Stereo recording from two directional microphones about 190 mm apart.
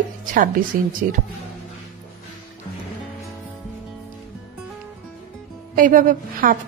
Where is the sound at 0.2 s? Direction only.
45° right (ahead or behind).